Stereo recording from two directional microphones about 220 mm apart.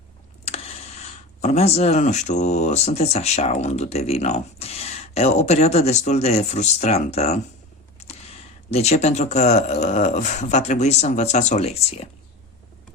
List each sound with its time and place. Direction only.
0.4 s speech: 30° left (ahead or behind)